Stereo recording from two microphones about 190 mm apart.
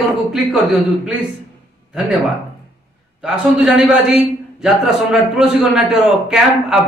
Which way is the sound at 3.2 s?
5° right (ahead or behind).